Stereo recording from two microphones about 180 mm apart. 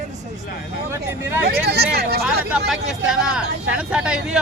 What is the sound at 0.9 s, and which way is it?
Speech, 10° right (ahead or behind).